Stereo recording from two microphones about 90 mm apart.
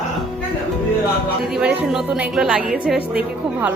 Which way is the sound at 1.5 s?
10° right (ahead or behind).